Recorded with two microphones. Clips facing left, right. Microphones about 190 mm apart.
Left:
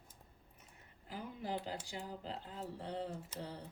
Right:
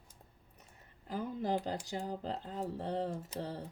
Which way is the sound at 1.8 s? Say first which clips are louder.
Right 7 dB; 40° right (ahead or behind).